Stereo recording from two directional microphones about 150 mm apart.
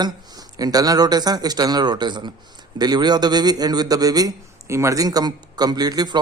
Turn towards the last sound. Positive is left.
turn(degrees=-25)  # may be behind; listen again after turning